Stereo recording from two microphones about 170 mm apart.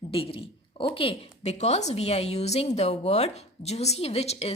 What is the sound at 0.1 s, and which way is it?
A woman's voice, 35° left (ahead or behind).